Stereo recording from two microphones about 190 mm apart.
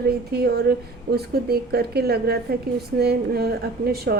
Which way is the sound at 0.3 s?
55° right (ahead or behind).